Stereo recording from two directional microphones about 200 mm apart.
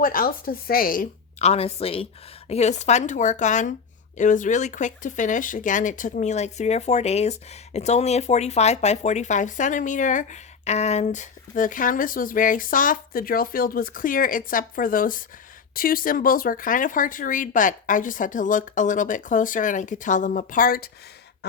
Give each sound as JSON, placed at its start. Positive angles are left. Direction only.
{"t": 0.0, "sound": "a woman's voice", "side_deg": 45}